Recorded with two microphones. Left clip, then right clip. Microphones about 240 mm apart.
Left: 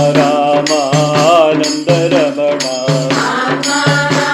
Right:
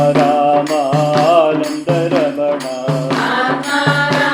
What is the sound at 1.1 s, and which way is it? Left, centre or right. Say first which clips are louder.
Music: left 2 dB; left.